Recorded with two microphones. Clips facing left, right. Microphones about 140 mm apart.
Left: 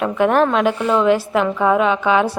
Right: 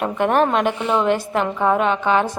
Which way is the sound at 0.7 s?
20° right (ahead or behind).